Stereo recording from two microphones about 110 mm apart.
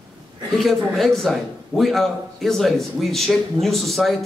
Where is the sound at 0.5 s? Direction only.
Centre (ahead or behind).